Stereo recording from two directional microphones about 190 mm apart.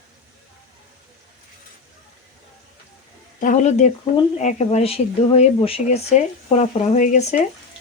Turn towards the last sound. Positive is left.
turn(degrees=40)  # may be behind; listen again after turning